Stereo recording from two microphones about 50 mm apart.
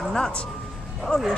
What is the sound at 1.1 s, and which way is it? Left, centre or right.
Speech, centre.